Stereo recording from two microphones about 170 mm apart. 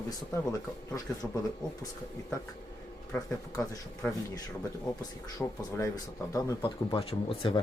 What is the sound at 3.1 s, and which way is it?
Speech, 15° left (ahead or behind).